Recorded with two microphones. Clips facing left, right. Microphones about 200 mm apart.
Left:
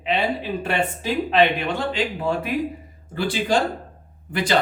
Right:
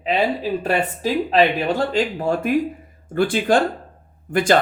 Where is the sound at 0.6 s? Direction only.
40° right (ahead or behind).